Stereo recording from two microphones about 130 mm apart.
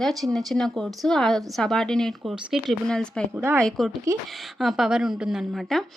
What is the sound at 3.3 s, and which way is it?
Speech, 20° right (ahead or behind).